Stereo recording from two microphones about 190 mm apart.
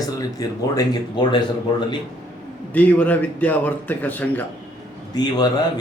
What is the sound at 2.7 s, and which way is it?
A man's voice, 10° left (ahead or behind).